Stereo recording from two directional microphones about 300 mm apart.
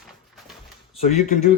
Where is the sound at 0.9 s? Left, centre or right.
Left.